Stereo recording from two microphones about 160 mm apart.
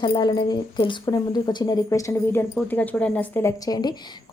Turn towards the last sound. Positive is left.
turn(degrees=25)  # may be behind; listen again after turning